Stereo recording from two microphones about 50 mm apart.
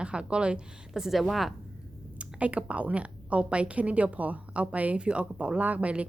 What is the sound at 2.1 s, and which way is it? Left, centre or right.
Speech, right.